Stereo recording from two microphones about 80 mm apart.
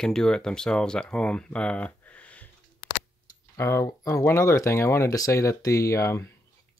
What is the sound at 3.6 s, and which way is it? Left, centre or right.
Speech, left.